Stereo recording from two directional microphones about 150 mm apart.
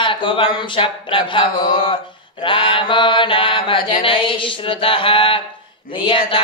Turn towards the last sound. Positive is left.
turn(degrees=35)  # may be behind; listen again after turning